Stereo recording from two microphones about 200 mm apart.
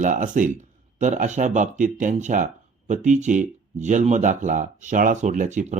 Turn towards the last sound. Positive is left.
turn(degrees=-40)  # may be behind; listen again after turning